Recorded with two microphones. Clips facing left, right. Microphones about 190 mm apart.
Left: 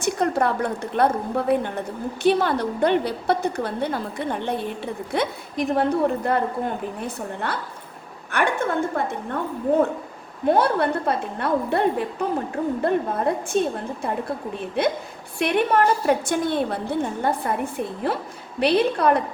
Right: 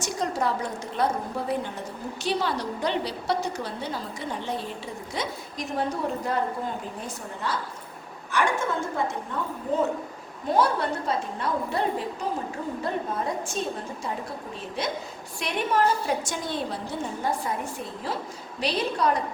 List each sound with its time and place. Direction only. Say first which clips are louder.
0.0 s a woman's voice: left 6 dB; 60° left (ahead or behind)
10.4 s a woman's voice: left 5 dB; 60° left (ahead or behind)